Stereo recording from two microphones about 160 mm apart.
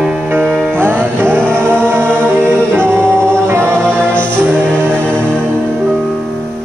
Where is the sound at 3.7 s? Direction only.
5° left (ahead or behind).